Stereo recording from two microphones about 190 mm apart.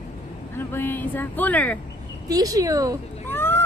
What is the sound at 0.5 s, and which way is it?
Speech, 10° left (ahead or behind).